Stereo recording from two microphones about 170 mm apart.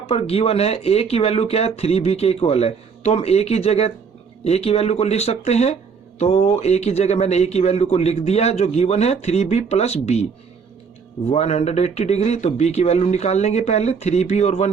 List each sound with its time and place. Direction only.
0.1 s a man's voice: 35° left (ahead or behind)
11.3 s a man's voice: 40° left (ahead or behind)